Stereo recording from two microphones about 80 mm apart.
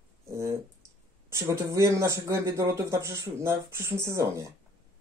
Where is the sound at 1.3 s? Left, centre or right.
Right.